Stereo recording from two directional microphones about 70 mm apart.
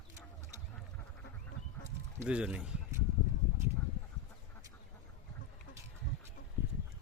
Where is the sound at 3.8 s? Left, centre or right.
Left.